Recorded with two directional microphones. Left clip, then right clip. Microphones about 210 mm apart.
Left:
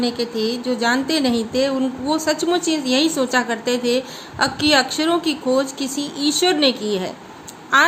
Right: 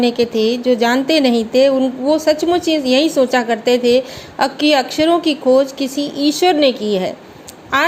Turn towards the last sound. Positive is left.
turn(degrees=-20)  # may be behind; listen again after turning